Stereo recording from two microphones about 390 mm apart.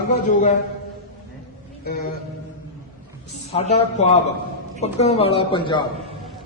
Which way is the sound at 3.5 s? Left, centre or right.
Centre.